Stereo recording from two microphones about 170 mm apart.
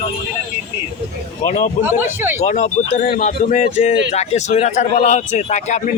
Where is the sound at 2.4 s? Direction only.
45° left (ahead or behind).